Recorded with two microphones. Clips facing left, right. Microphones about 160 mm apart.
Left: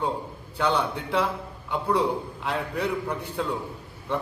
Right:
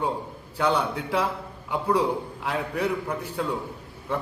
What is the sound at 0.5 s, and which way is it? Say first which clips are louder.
A man's voice: right 1 dB; 10° right (ahead or behind).